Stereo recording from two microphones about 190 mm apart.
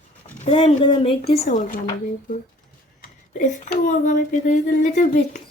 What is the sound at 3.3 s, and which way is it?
A woman's voice, 40° left (ahead or behind).